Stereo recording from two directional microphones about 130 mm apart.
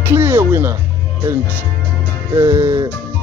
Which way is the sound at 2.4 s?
20° right (ahead or behind).